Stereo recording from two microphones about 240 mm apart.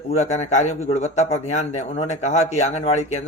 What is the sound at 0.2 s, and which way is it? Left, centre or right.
A man's voice, left.